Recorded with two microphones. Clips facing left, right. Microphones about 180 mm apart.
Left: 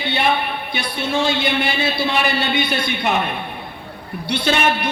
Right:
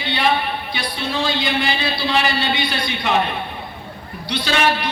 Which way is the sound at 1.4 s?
55° left (ahead or behind).